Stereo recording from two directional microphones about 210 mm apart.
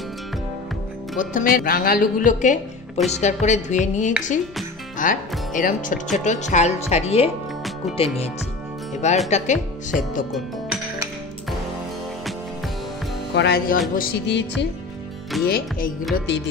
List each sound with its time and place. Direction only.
1.1 s speech: 40° left (ahead or behind)
8.9 s speech: 35° left (ahead or behind)
13.3 s music: 50° left (ahead or behind)